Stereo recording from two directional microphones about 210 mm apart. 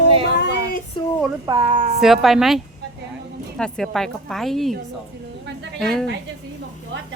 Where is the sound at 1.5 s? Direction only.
20° right (ahead or behind).